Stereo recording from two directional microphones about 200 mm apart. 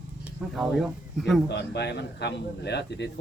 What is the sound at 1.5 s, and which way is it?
Speech, 55° left (ahead or behind).